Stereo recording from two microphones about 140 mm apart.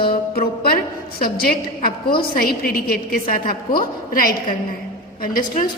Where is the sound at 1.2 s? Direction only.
90° left.